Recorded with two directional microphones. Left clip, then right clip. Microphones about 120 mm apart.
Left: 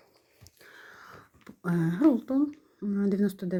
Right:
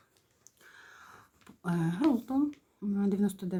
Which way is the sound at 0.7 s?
25° left (ahead or behind).